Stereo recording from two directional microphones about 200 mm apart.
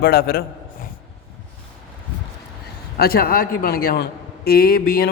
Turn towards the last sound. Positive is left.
turn(degrees=50)  # may be behind; listen again after turning